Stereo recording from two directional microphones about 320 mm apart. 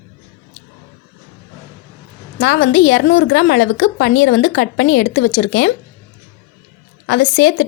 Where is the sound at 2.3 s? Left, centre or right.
Left.